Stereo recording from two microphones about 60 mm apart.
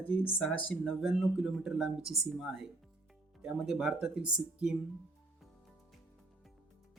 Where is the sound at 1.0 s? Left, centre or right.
Centre.